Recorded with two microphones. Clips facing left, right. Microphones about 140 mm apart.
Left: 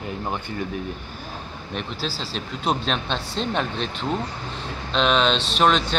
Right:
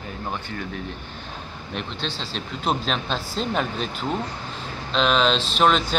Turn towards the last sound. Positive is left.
turn(degrees=0)  # may be behind; listen again after turning